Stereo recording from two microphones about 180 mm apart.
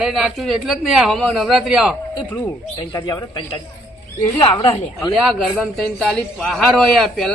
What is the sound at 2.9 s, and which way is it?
Speech, 20° left (ahead or behind).